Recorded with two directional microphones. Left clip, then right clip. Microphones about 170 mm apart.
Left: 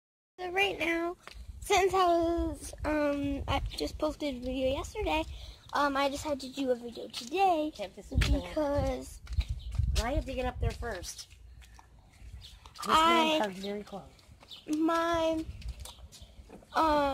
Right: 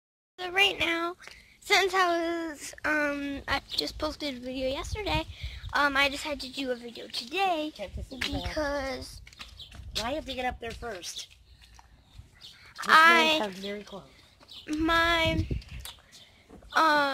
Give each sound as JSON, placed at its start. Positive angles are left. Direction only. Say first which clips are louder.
{"t": 0.4, "sound": "a woman's voice", "louder": "right 5 dB", "side_deg": 0}
{"t": 2.3, "sound": "speech", "louder": "even", "side_deg": -10}
{"t": 2.7, "sound": "a woman's voice", "louder": "right 3 dB", "side_deg": 20}
{"t": 9.9, "sound": "a woman's voice", "louder": "right 2 dB", "side_deg": -5}
{"t": 10.3, "sound": "speech", "louder": "right 3 dB", "side_deg": 10}
{"t": 12.8, "sound": "a woman's voice", "louder": "right 6 dB", "side_deg": 0}
{"t": 13.4, "sound": "speech", "louder": "even", "side_deg": -35}
{"t": 14.8, "sound": "a woman's voice", "louder": "right 4 dB", "side_deg": 5}
{"t": 16.7, "sound": "a woman's voice", "louder": "right 4 dB", "side_deg": 0}